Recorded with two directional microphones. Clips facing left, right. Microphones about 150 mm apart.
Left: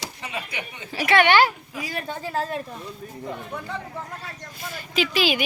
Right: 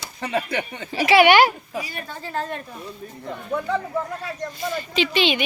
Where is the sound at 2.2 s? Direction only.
5° left (ahead or behind).